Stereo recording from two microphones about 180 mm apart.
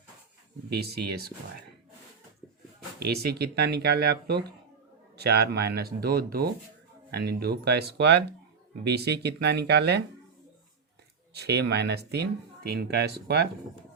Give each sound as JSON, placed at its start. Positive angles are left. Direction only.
{"t": 0.7, "sound": "speech", "side_deg": -60}
{"t": 3.0, "sound": "speech", "side_deg": -65}
{"t": 11.3, "sound": "speech", "side_deg": -65}